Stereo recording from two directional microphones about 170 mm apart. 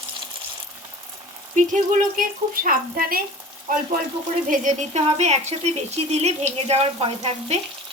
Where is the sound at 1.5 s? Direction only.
45° right (ahead or behind).